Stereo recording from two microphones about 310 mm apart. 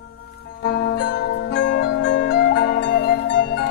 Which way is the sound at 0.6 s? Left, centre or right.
Left.